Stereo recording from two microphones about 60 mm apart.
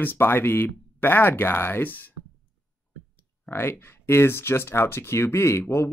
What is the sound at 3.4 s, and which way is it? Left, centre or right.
Speech, left.